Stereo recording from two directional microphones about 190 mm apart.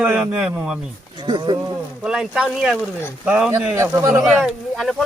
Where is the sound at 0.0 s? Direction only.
5° right (ahead or behind).